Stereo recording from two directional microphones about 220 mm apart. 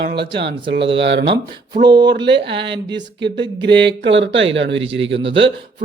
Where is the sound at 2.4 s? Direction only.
55° right (ahead or behind).